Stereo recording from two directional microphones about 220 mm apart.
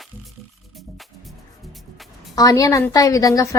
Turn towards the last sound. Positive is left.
turn(degrees=15)  # may be behind; listen again after turning